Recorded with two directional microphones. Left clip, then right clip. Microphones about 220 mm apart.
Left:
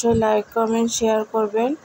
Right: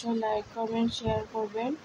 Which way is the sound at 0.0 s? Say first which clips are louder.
Left 12 dB; 30° left (ahead or behind).